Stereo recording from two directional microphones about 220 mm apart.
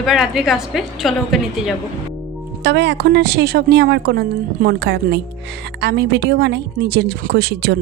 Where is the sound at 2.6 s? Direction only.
50° right (ahead or behind).